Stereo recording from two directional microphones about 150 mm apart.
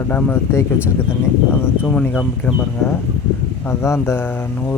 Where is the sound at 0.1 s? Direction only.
10° left (ahead or behind).